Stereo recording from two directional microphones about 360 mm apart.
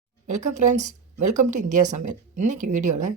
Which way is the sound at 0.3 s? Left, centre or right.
Right.